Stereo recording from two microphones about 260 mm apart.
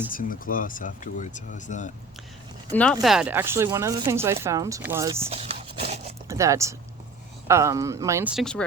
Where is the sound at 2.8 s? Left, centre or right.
Centre.